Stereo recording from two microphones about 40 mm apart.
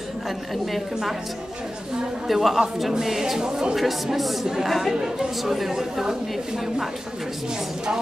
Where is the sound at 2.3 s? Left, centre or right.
Centre.